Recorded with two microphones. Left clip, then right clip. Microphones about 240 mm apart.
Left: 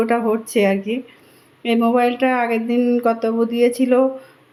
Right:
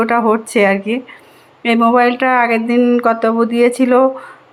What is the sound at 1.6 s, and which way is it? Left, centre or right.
Speech, centre.